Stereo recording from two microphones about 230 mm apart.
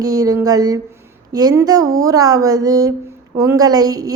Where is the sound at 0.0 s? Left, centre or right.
Centre.